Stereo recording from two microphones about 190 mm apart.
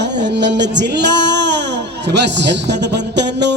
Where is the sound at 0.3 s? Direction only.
65° right (ahead or behind).